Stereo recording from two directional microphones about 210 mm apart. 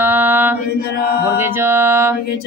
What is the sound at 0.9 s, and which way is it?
Chant, 50° left (ahead or behind).